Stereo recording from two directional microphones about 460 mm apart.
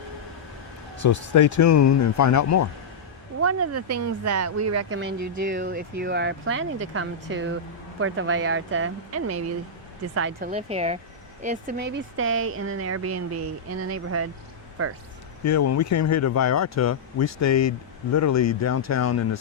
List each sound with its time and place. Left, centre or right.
1.0 s speech: left
3.3 s speech: right
5.4 s speech: centre
10.5 s speech: centre
11.9 s speech: right
15.4 s speech: left